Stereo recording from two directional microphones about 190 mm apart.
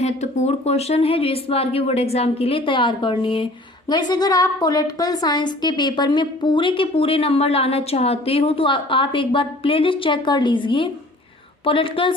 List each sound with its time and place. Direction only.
0.0 s a woman's voice: 35° left (ahead or behind)